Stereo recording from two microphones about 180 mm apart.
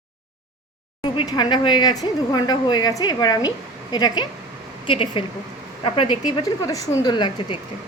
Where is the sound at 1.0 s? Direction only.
25° left (ahead or behind).